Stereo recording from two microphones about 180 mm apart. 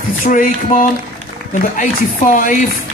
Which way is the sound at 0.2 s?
50° left (ahead or behind).